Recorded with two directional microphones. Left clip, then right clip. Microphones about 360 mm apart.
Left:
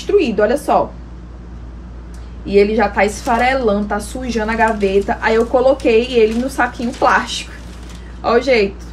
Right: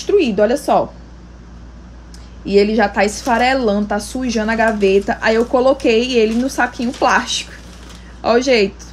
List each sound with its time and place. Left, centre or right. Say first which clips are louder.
0.0 s speech: even; right
2.4 s a woman's voice: left 1 dB; right